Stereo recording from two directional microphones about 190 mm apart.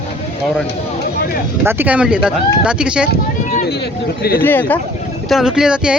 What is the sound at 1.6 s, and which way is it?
Speech, 10° right (ahead or behind).